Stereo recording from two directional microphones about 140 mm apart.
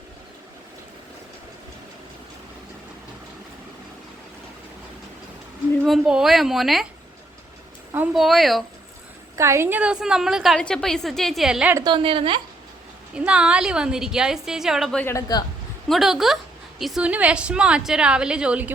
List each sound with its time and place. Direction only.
5.8 s a woman's voice: centre (ahead or behind)
8.1 s a woman's voice: centre (ahead or behind)
9.3 s a woman's voice: 20° right (ahead or behind); by 11.7 s 5° right (ahead or behind)
11.8 s a woman's voice: 35° right (ahead or behind)
13.1 s a woman's voice: 5° right (ahead or behind)
15.0 s a man's voice: 25° left (ahead or behind)
15.9 s a woman's voice: centre (ahead or behind)